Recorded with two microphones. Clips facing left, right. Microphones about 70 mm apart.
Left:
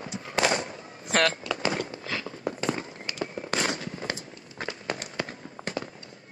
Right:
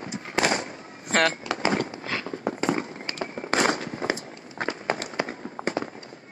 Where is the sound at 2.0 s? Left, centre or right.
Right.